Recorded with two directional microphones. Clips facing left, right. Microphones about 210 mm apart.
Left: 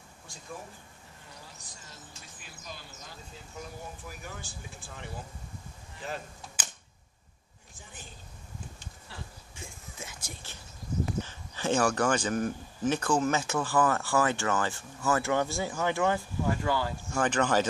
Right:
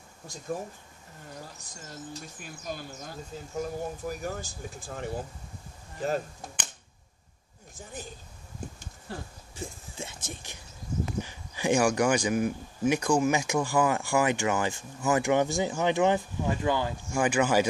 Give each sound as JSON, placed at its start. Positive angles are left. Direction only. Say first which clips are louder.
{"t": 1.6, "sound": "speech", "louder": "right 8 dB", "side_deg": -45}
{"t": 7.7, "sound": "a woman's voice", "louder": "right 9 dB", "side_deg": -40}
{"t": 9.1, "sound": "speech", "louder": "right 8 dB", "side_deg": -45}
{"t": 9.9, "sound": "a sound", "louder": "right 5 dB", "side_deg": -25}
{"t": 11.2, "sound": "speech", "louder": "right 3 dB", "side_deg": -15}